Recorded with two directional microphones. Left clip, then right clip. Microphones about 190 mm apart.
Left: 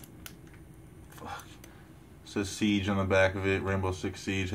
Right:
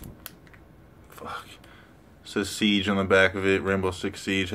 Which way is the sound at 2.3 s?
30° right (ahead or behind).